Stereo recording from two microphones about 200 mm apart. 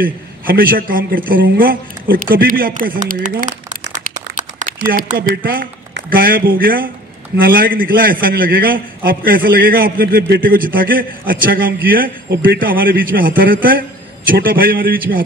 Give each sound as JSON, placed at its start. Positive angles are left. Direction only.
{"t": 0.0, "sound": "a man's voice", "side_deg": -45}
{"t": 3.9, "sound": "a sound", "side_deg": -40}
{"t": 4.9, "sound": "a man's voice", "side_deg": -45}